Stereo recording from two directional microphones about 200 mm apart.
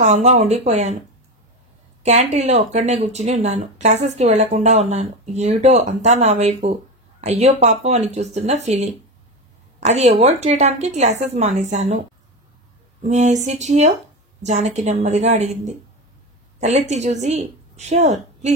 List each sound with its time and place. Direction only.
0.0 s speech: 35° right (ahead or behind)
2.0 s a woman's voice: 35° right (ahead or behind)
13.1 s a woman's voice: 35° right (ahead or behind)